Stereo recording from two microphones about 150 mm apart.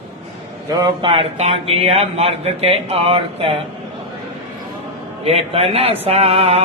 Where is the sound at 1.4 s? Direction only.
45° right (ahead or behind).